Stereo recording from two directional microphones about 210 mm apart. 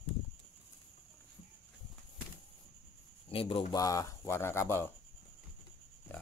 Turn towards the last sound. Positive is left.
turn(degrees=10)  # may be behind; listen again after turning